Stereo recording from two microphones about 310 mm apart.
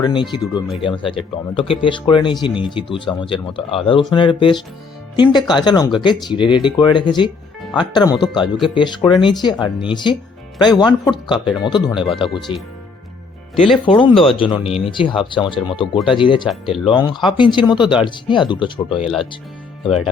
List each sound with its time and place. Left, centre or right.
0.0 s speech: centre
13.8 s speech: centre
16.5 s speech: centre
16.9 s speech: centre
18.9 s speech: centre